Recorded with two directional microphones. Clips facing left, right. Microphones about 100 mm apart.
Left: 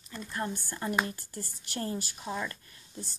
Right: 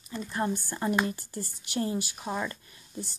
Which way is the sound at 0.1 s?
15° right (ahead or behind).